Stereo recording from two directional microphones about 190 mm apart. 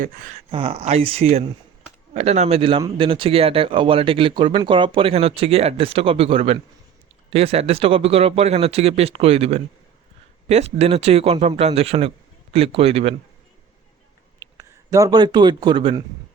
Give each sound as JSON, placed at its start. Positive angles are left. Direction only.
{"t": 0.5, "sound": "speech", "side_deg": -30}
{"t": 14.6, "sound": "speech", "side_deg": -15}